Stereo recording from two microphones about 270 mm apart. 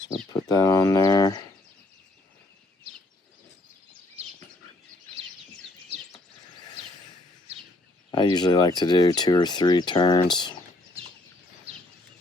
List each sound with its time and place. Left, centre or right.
0.4 s speech: centre
8.1 s speech: centre